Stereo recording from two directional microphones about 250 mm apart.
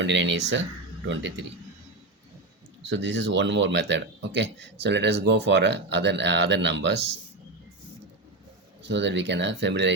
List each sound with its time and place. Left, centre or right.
0.0 s speech: right
2.9 s speech: right
8.8 s speech: right